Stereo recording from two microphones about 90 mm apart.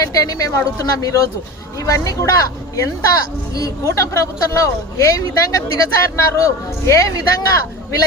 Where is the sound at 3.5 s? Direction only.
40° left (ahead or behind).